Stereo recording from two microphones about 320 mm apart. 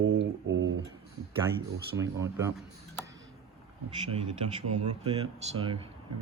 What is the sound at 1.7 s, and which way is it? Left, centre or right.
Speech, centre.